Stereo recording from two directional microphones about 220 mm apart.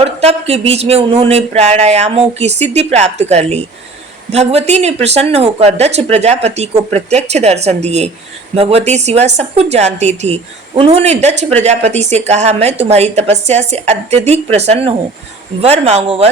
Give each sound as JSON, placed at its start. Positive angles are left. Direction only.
{"t": 0.0, "sound": "a woman's voice", "side_deg": -30}